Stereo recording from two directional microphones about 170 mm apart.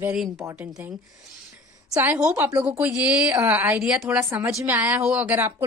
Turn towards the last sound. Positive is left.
turn(degrees=-10)  # may be behind; listen again after turning